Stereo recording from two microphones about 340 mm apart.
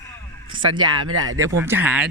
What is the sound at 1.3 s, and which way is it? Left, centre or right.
Speech, centre.